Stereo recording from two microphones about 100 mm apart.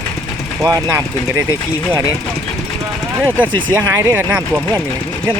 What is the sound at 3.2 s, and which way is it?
Speech, 15° right (ahead or behind).